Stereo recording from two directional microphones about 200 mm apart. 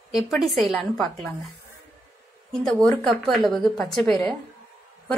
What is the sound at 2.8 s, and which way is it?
A woman's voice, centre (ahead or behind).